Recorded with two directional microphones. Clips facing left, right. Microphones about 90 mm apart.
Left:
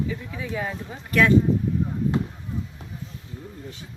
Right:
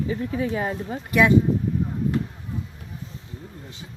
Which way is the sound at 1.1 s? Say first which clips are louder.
Right 1 dB; 15° right (ahead or behind).